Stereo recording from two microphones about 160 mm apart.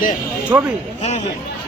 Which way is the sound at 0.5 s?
15° right (ahead or behind).